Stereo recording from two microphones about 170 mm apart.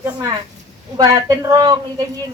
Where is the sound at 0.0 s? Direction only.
20° right (ahead or behind).